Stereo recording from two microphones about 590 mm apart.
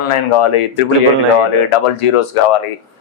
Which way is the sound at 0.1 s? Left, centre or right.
Left.